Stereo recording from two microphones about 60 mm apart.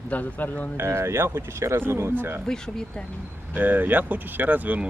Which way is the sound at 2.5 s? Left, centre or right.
Centre.